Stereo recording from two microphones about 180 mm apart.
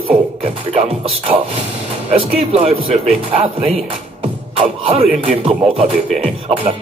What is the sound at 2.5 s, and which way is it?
Speech, 30° right (ahead or behind).